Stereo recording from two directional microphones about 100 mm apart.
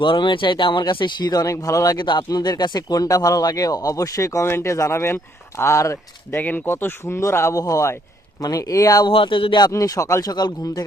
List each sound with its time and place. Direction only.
0.0 s speech: 55° left (ahead or behind); by 6.4 s 30° left (ahead or behind)
6.4 s speech: 20° left (ahead or behind); by 9.0 s 35° left (ahead or behind)
9.0 s speech: 55° left (ahead or behind)
9.6 s speech: 35° left (ahead or behind)